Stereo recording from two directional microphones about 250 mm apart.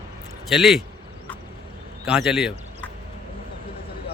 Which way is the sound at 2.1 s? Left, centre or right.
Centre.